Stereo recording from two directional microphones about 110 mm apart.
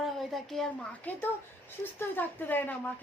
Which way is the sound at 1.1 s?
15° left (ahead or behind).